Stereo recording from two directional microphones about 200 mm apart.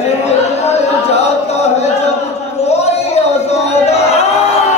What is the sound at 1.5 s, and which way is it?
Chant, 35° left (ahead or behind).